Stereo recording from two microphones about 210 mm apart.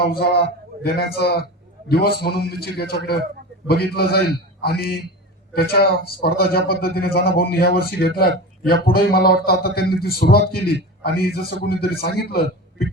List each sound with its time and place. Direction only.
0.1 s a man's voice: 50° left (ahead or behind)